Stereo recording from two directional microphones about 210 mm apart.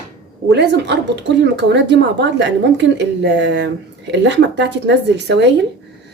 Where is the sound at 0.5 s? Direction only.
55° right (ahead or behind).